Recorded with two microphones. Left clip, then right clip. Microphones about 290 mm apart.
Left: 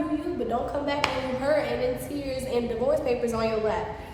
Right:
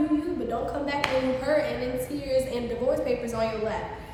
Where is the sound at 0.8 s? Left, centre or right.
Centre.